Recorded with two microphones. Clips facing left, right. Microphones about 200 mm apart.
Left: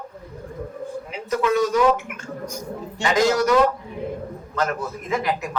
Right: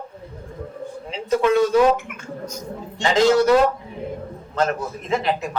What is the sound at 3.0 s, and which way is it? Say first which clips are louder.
Speech: right 3 dB; 25° right (ahead or behind).